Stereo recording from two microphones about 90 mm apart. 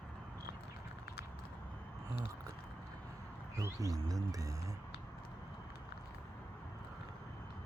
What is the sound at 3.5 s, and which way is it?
Speech, 40° right (ahead or behind).